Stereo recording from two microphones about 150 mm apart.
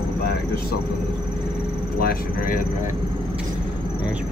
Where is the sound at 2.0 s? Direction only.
80° left.